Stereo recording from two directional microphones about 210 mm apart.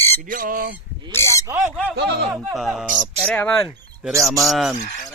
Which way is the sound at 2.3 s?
Centre (ahead or behind).